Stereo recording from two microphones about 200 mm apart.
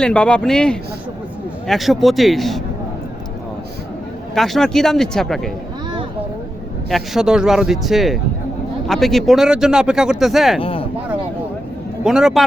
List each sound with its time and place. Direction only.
0.0 s speech: 5° left (ahead or behind)
4.4 s speech: centre (ahead or behind)
6.9 s speech: centre (ahead or behind)
10.6 s a sound: 30° left (ahead or behind)
12.0 s speech: 5° right (ahead or behind)